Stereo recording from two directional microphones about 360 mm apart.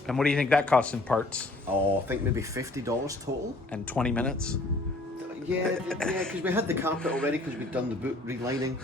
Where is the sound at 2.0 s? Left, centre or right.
Centre.